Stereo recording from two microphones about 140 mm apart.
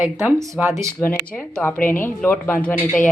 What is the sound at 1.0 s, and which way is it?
Speech, 10° left (ahead or behind).